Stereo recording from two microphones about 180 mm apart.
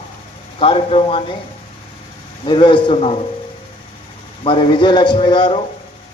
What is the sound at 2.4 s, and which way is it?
Speech, 30° left (ahead or behind).